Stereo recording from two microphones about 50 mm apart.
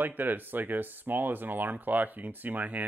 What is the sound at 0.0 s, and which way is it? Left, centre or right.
Speech, right.